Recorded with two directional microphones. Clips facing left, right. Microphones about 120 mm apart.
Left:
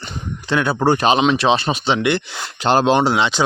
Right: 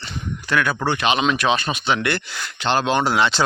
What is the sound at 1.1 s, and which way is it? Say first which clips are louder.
Speech: left 4 dB; 25° left (ahead or behind).